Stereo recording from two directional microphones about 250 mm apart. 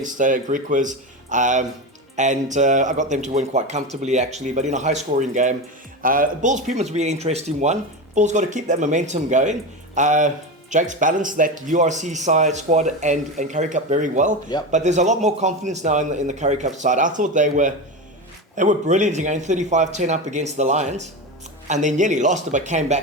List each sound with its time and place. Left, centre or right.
0.0 s speech: right